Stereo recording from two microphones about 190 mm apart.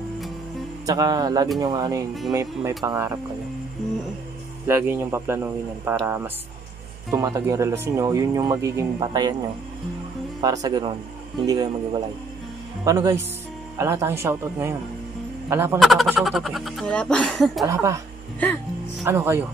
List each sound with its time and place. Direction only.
0.8 s a man's voice: 20° right (ahead or behind)
4.6 s a man's voice: 10° right (ahead or behind)
10.4 s a man's voice: 20° right (ahead or behind)
15.8 s speech: centre (ahead or behind)
17.6 s a man's voice: 15° right (ahead or behind)
19.0 s a man's voice: 15° right (ahead or behind)